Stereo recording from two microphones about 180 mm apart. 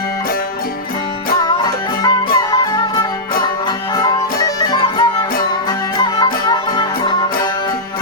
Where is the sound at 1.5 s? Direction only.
25° left (ahead or behind).